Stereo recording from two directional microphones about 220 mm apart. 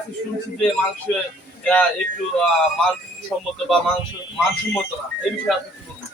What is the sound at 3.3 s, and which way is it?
Speech, 5° left (ahead or behind).